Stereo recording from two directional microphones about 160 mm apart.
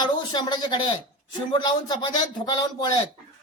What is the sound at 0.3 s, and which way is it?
Speech, 25° left (ahead or behind).